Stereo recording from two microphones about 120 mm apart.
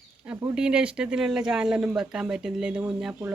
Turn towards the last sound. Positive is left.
turn(degrees=-10)  # may be behind; listen again after turning